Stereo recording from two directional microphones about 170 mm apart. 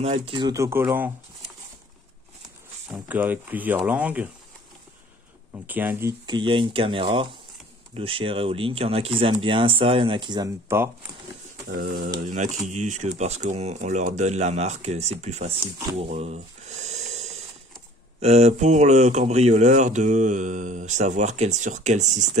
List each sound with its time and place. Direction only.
0.0 s speech: 30° right (ahead or behind); by 1.1 s 15° right (ahead or behind)
2.9 s speech: 10° right (ahead or behind)
5.7 s speech: 10° right (ahead or behind)
6.2 s speech: 25° right (ahead or behind)
11.7 s speech: 65° right (ahead or behind)
12.3 s speech: 45° right (ahead or behind)
16.0 s snake: 40° right (ahead or behind)
18.2 s speech: 40° right (ahead or behind)